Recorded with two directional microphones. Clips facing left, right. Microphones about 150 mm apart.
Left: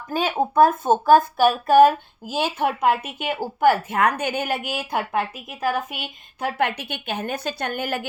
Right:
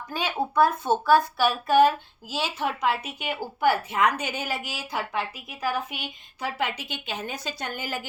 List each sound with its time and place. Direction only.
0.1 s a woman's voice: 45° left (ahead or behind)